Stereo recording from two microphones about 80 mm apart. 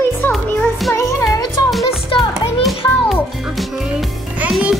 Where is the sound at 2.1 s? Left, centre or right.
Left.